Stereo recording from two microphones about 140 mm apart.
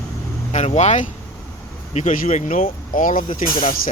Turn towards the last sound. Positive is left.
turn(degrees=85)